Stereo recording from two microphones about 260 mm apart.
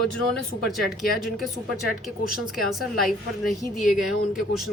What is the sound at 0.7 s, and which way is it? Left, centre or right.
A woman's voice, centre.